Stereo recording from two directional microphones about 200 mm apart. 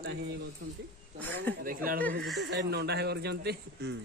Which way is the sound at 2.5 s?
55° right (ahead or behind).